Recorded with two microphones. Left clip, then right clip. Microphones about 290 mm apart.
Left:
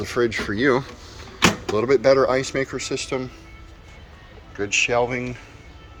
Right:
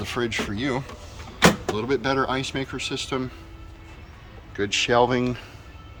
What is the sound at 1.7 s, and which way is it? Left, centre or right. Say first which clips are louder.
Speech: left 7 dB; centre.